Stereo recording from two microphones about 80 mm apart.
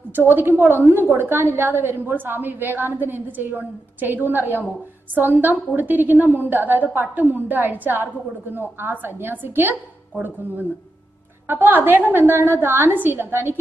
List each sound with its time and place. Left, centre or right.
0.1 s a woman's voice: right
11.4 s a woman's voice: right